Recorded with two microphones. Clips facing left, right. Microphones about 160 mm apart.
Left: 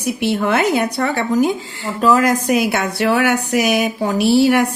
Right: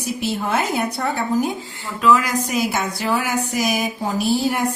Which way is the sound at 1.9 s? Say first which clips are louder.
Left 3 dB; 40° left (ahead or behind).